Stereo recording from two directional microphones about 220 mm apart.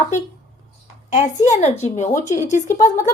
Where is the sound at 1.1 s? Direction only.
30° left (ahead or behind).